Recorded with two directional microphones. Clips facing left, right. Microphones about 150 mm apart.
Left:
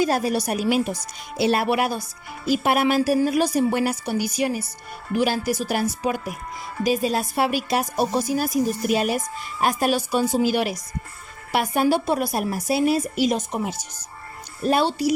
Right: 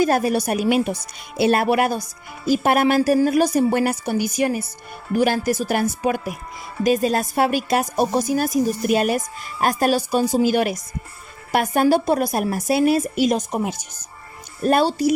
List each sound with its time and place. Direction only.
0.0 s a woman's voice: 55° right (ahead or behind)
14.6 s a woman's voice: 45° right (ahead or behind)